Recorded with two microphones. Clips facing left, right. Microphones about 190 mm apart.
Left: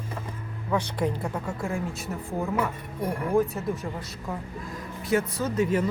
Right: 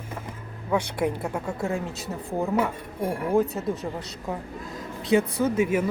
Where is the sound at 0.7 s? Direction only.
10° right (ahead or behind).